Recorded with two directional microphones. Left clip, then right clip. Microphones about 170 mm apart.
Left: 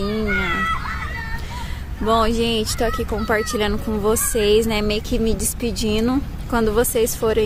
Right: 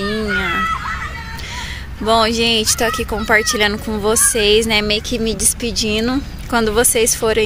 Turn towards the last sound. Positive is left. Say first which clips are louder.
# right 3 dB
turn(degrees=-5)  # may be behind; listen again after turning